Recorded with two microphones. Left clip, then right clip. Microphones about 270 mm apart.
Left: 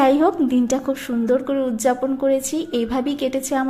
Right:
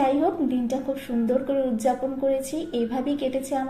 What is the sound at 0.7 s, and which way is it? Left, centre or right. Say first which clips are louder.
Speech: left 5 dB; left.